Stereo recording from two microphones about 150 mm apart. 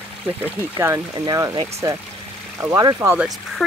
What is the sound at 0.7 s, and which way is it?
Speech, 20° right (ahead or behind).